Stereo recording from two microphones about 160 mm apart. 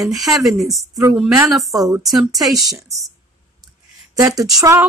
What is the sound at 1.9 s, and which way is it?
Speech, 20° right (ahead or behind).